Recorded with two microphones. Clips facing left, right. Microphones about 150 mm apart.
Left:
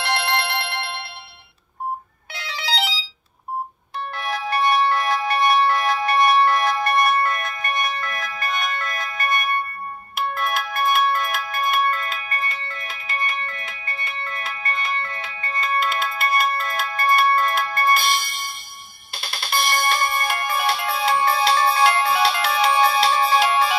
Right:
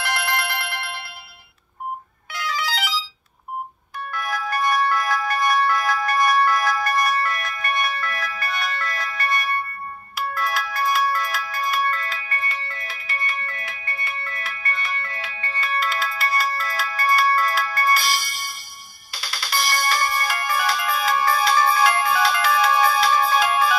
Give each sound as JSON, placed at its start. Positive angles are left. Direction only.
{"t": 0.0, "sound": "music", "side_deg": 30}
{"t": 2.3, "sound": "ringtone", "side_deg": 30}
{"t": 4.1, "sound": "ringtone", "side_deg": 30}
{"t": 11.8, "sound": "music", "side_deg": 25}